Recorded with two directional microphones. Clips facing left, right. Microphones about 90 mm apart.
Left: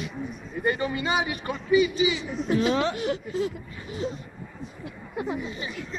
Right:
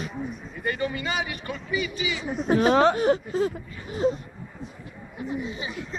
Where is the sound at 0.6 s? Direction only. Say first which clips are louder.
Left 2 dB; 20° left (ahead or behind).